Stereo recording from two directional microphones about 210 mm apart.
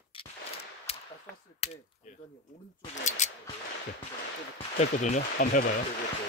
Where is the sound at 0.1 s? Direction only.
25° left (ahead or behind).